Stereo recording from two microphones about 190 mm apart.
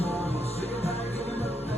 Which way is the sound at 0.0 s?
30° left (ahead or behind).